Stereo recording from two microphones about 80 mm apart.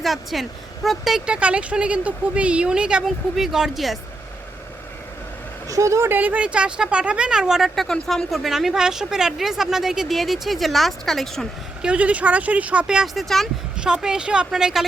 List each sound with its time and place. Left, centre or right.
0.0 s speech: centre
5.6 s speech: right
6.1 s speech: right; by 11.4 s centre
11.8 s speech: centre
13.2 s speech: centre
13.8 s speech: centre